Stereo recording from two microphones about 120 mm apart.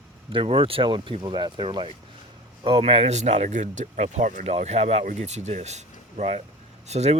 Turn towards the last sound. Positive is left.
turn(degrees=-65)  # may be behind; listen again after turning